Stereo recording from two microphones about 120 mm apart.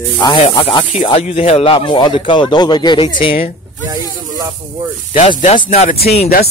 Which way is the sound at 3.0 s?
50° left (ahead or behind).